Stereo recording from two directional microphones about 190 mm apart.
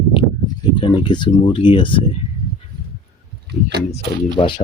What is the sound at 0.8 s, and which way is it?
Speech, 25° left (ahead or behind).